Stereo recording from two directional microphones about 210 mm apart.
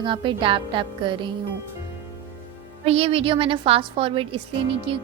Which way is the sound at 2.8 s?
30° right (ahead or behind).